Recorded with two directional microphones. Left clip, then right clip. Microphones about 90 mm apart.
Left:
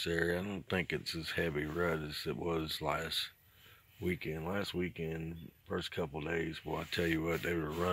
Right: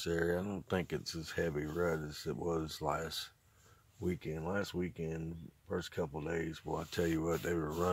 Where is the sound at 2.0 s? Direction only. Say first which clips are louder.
Left 3 dB; 20° right (ahead or behind).